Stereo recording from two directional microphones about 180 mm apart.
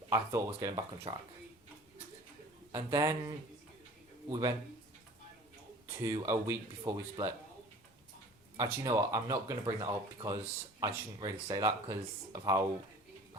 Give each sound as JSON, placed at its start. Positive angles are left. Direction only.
{"t": 0.1, "sound": "speech", "side_deg": -20}
{"t": 2.7, "sound": "speech", "side_deg": -20}
{"t": 6.0, "sound": "speech", "side_deg": -15}
{"t": 8.6, "sound": "speech", "side_deg": -20}